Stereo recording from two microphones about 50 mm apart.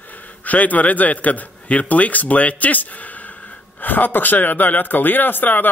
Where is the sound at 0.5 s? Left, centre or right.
Left.